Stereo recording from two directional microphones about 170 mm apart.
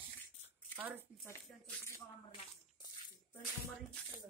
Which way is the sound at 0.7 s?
10° right (ahead or behind).